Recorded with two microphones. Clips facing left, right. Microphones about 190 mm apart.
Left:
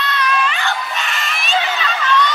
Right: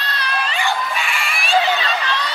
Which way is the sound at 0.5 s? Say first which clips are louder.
Right 1 dB; 10° right (ahead or behind).